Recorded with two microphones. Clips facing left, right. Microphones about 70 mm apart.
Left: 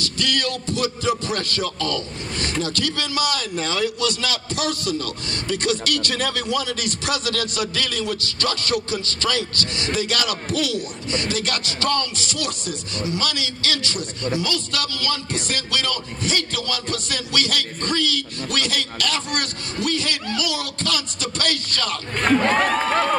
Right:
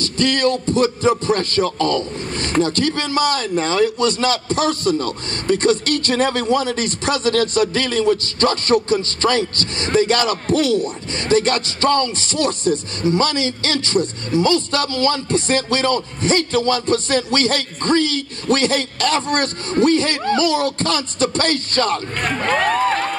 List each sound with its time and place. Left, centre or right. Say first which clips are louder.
0.0 s a man's voice: right 7 dB; right